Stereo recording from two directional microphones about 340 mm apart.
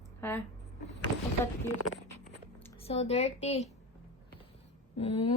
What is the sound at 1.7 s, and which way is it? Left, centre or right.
Speech, left.